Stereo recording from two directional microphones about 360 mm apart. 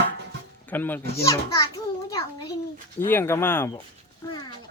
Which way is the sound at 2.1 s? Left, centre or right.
Centre.